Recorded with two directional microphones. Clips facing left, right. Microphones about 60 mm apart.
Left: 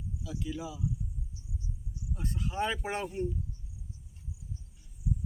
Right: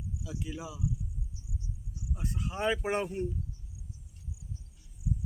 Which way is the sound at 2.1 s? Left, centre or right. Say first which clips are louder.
Left 2 dB; centre.